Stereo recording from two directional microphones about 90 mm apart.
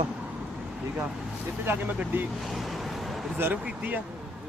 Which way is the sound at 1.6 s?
20° right (ahead or behind).